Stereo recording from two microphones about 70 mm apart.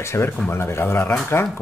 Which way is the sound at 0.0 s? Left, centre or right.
Left.